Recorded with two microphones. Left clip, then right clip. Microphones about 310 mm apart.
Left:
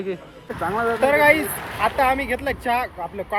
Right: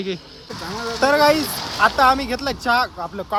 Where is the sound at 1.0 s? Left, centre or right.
Centre.